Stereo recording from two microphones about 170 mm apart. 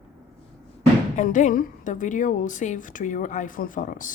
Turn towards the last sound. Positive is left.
turn(degrees=50)  # may be behind; listen again after turning